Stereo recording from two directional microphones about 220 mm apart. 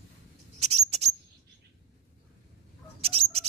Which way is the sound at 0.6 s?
30° right (ahead or behind).